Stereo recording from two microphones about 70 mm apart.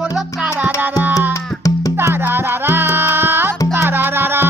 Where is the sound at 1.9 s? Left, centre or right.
Right.